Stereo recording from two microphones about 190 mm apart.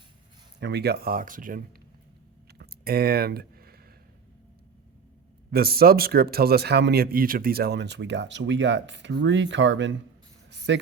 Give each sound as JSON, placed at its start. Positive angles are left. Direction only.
{"t": 0.6, "sound": "speech", "side_deg": -60}
{"t": 2.5, "sound": "a sound", "side_deg": -55}
{"t": 5.5, "sound": "speech", "side_deg": -55}